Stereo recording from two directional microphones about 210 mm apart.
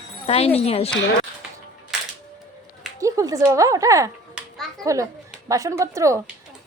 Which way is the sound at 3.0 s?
15° right (ahead or behind).